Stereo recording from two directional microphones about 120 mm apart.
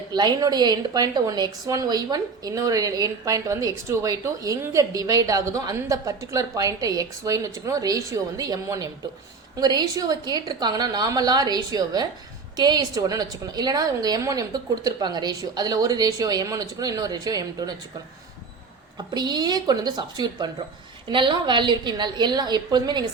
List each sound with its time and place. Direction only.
0.1 s a woman's voice: 35° right (ahead or behind)
19.1 s a woman's voice: 35° right (ahead or behind)